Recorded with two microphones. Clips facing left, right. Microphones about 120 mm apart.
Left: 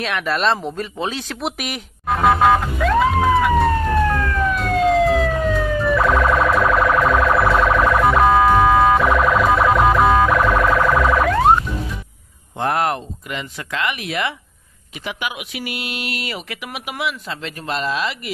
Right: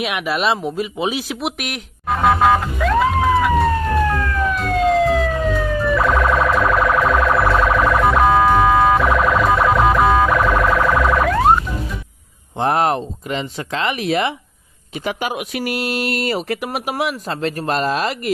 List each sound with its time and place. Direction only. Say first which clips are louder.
0.0 s speech: even; 10° right (ahead or behind)
1.4 s emergency vehicle: right 1 dB; centre (ahead or behind)
12.5 s speech: right 3 dB; 25° right (ahead or behind); by 18.3 s 45° right (ahead or behind)